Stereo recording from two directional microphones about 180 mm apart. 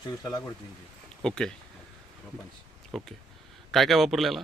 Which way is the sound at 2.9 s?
Centre (ahead or behind).